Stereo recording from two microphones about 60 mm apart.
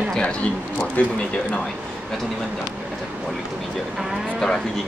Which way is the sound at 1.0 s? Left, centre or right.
Left.